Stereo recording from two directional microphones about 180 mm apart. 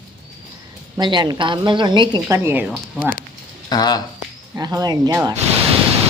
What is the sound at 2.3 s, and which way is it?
Speech, 15° right (ahead or behind).